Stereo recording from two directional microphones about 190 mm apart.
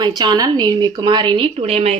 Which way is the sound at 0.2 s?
20° right (ahead or behind).